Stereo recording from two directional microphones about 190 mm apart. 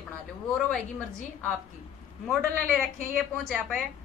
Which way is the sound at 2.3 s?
5° left (ahead or behind).